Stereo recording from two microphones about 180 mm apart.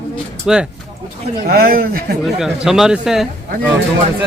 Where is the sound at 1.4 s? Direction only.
55° right (ahead or behind).